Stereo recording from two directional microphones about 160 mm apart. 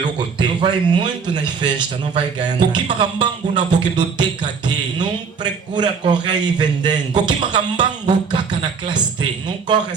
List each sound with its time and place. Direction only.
0.0 s a man's voice: 30° right (ahead or behind)